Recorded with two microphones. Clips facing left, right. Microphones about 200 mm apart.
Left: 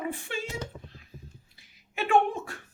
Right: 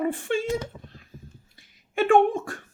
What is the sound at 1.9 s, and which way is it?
Speech, 50° right (ahead or behind).